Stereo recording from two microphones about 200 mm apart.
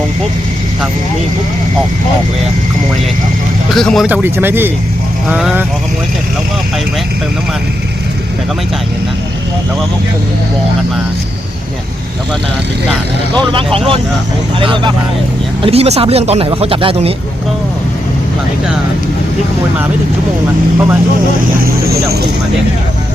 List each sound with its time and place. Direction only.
3.8 s speech: centre (ahead or behind)
13.7 s speech: 30° right (ahead or behind)
21.6 s speech: 50° right (ahead or behind)